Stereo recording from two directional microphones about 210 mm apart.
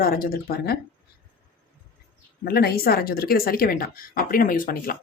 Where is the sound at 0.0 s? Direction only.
45° left (ahead or behind).